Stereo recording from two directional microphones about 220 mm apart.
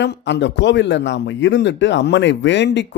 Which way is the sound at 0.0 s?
55° left (ahead or behind).